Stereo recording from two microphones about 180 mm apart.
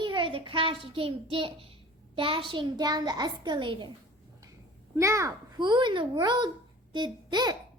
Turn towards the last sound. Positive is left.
turn(degrees=-25)  # may be behind; listen again after turning